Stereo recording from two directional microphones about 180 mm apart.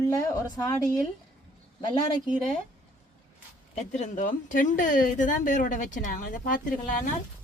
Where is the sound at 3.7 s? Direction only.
40° left (ahead or behind).